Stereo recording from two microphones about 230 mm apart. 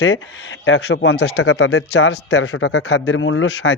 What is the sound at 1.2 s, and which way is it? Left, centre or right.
Speech, left.